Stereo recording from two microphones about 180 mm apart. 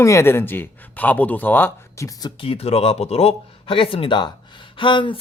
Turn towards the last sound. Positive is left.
turn(degrees=25)  # may be behind; listen again after turning